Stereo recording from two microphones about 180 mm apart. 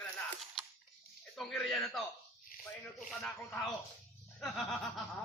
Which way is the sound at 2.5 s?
50° left (ahead or behind).